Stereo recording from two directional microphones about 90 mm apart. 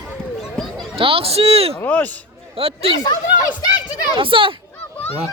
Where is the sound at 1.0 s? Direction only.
90° right.